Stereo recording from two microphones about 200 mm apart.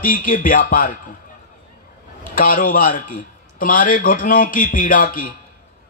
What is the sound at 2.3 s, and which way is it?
A man's voice, 45° left (ahead or behind).